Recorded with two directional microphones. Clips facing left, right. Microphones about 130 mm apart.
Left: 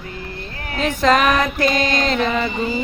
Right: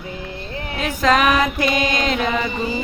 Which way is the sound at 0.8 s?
5° right (ahead or behind).